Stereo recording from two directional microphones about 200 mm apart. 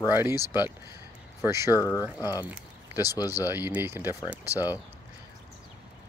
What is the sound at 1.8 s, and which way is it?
Speech, 15° left (ahead or behind).